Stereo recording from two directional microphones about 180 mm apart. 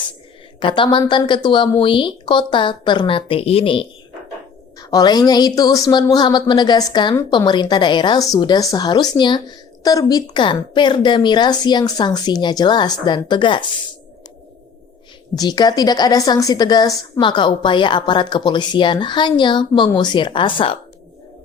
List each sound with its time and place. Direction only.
0.6 s a woman's voice: 25° left (ahead or behind)
15.4 s a woman's voice: 25° left (ahead or behind)